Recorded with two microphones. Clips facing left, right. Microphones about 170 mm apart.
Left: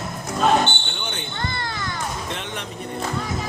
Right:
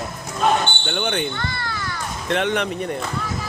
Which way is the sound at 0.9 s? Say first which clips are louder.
Right 9 dB; 60° right (ahead or behind).